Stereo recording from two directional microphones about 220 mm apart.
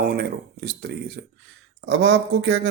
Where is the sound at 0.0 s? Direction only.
45° right (ahead or behind).